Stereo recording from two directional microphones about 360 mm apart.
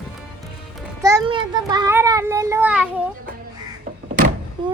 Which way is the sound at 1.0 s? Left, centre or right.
Centre.